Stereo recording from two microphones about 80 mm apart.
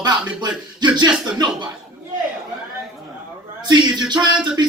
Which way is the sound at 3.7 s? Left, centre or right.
Right.